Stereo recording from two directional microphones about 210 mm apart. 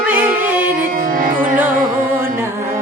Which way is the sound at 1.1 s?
40° right (ahead or behind).